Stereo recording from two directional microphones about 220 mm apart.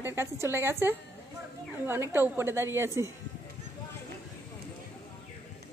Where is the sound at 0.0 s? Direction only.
10° right (ahead or behind).